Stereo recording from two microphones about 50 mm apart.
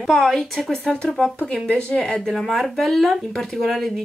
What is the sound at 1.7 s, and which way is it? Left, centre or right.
Speech, left.